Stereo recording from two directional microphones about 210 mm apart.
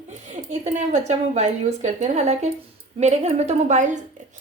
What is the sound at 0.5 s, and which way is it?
Speech, 30° right (ahead or behind).